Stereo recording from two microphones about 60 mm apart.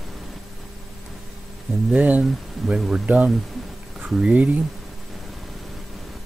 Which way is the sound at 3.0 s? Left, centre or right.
Right.